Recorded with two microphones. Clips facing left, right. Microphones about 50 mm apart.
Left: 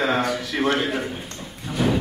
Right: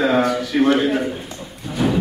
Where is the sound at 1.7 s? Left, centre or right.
Centre.